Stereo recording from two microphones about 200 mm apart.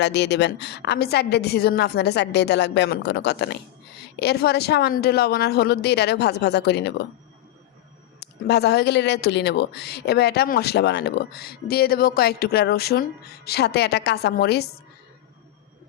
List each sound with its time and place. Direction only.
0.0 s a woman's voice: 60° left (ahead or behind)
8.2 s speech: 55° left (ahead or behind)